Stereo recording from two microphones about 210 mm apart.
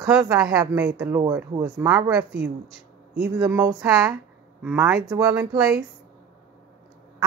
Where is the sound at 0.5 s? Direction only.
15° right (ahead or behind).